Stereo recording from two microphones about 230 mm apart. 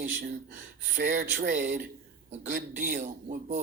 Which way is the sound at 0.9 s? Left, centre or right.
Right.